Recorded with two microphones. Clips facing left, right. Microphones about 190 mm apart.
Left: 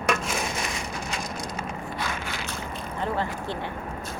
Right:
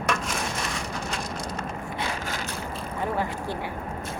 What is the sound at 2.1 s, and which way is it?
Boat, 45° right (ahead or behind).